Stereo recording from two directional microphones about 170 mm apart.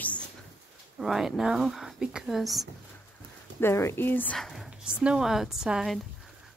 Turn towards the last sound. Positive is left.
turn(degrees=0)  # may be behind; listen again after turning